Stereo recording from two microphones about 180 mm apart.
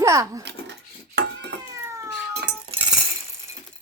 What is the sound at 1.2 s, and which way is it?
Cat, 70° right (ahead or behind).